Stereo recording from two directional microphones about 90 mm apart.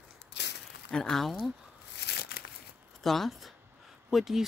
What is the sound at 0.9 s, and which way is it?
Speech, 5° left (ahead or behind).